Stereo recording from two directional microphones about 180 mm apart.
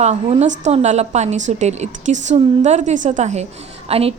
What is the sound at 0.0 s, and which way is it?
A woman's voice, 40° right (ahead or behind).